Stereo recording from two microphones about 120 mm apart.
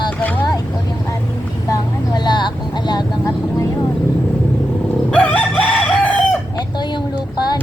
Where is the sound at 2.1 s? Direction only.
35° left (ahead or behind).